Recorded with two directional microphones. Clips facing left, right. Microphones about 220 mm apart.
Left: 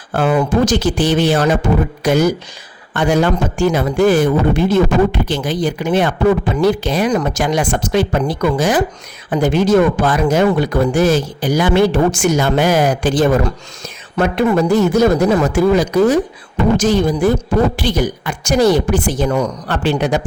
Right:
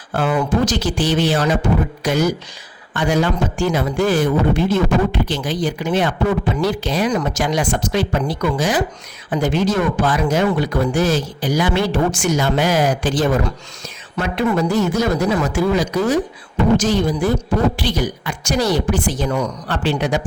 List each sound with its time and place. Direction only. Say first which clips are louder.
0.1 s speech: left 4 dB; 50° left (ahead or behind)